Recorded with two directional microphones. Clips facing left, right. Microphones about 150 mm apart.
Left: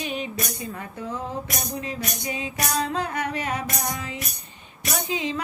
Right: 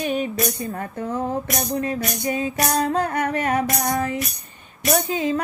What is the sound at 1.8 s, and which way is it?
Music, 50° right (ahead or behind).